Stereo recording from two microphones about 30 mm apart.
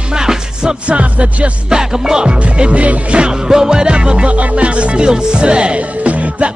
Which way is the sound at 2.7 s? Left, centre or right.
Right.